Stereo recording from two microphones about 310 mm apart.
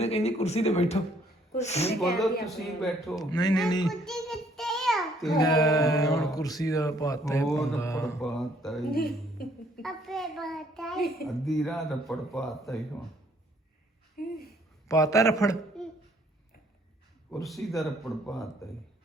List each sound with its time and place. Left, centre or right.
0.0 s speech: centre
2.0 s a man's voice: centre
3.2 s speech: centre
3.8 s child singing: centre
5.3 s a man's voice: centre
8.9 s speech: left
9.8 s a child's voice: centre
14.2 s speech: left
14.8 s a man's voice: centre
17.3 s a man's voice: centre